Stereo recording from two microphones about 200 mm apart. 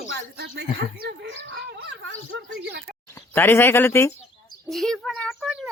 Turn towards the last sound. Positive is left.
turn(degrees=0)  # may be behind; listen again after turning